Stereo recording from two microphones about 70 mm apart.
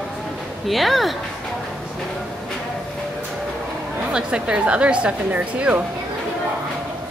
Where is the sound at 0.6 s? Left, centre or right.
Centre.